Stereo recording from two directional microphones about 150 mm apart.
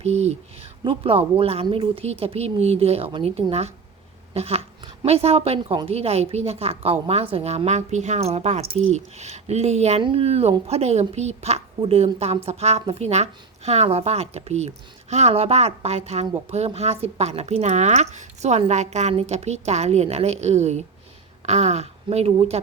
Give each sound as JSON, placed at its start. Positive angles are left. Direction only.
{"t": 0.0, "sound": "a woman's voice", "side_deg": -45}